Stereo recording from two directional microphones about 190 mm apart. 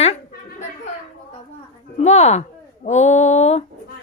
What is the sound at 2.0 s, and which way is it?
Speech, 35° left (ahead or behind).